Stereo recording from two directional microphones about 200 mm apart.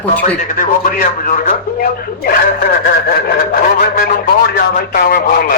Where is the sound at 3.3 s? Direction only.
45° left (ahead or behind).